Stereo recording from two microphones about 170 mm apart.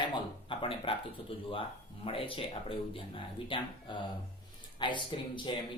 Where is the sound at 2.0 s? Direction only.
30° left (ahead or behind).